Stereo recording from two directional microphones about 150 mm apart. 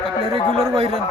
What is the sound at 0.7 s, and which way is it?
Speech, 40° right (ahead or behind).